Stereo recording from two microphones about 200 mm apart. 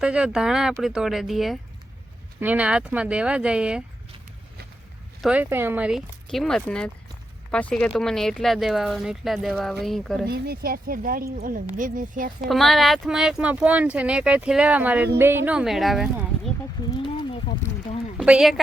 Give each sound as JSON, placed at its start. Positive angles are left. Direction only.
{"t": 0.0, "sound": "speech", "side_deg": -5}
{"t": 5.2, "sound": "speech", "side_deg": -5}
{"t": 10.2, "sound": "speech", "side_deg": -50}
{"t": 12.4, "sound": "speech", "side_deg": 0}
{"t": 18.2, "sound": "speech", "side_deg": 0}